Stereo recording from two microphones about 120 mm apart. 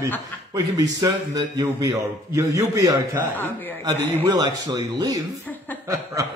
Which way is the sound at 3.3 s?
15° left (ahead or behind).